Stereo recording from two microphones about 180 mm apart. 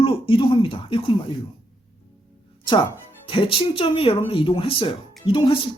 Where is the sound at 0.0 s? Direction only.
30° left (ahead or behind).